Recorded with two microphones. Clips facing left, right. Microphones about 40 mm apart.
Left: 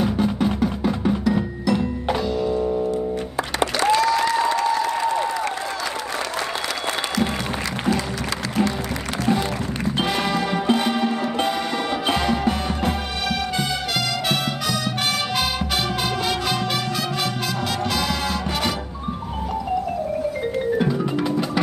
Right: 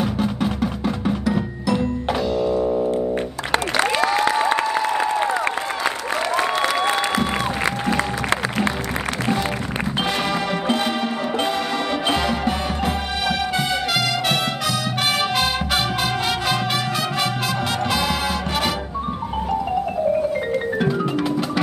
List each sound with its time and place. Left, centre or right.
0.0 s music: centre
3.9 s applause: right
9.9 s music: centre
20.7 s music: centre